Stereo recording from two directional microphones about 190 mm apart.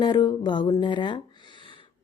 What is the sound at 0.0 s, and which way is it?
Speech, 20° left (ahead or behind).